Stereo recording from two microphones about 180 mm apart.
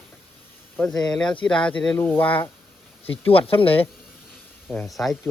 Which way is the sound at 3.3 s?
30° left (ahead or behind).